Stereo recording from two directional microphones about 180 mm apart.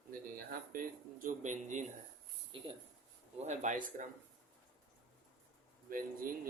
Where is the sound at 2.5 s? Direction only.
30° right (ahead or behind).